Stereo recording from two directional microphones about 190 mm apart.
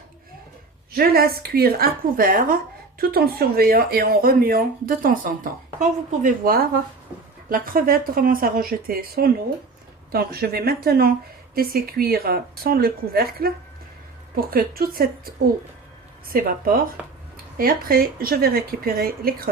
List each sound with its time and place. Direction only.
0.9 s speech: 55° right (ahead or behind)
14.5 s speech: 50° right (ahead or behind)